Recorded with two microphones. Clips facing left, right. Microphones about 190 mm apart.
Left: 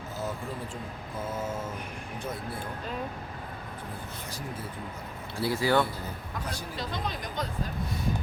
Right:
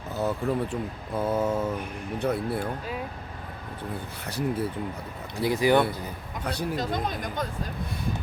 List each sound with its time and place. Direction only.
0.2 s speech: 65° right (ahead or behind)
5.4 s speech: 15° right (ahead or behind)
6.4 s speech: 65° right (ahead or behind)
6.7 s speech: 50° right (ahead or behind)